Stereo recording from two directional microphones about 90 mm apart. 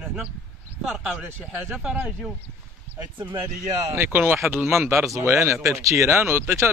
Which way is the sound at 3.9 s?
25° right (ahead or behind).